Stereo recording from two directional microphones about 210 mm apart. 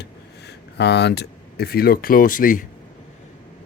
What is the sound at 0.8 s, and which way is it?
Speech, 55° left (ahead or behind).